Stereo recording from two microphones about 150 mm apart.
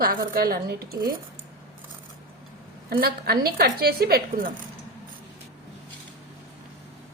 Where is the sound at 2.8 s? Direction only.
90° right.